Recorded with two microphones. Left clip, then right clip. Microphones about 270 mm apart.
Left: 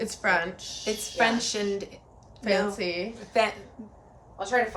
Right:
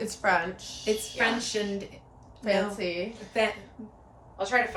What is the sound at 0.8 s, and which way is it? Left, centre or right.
Speech, centre.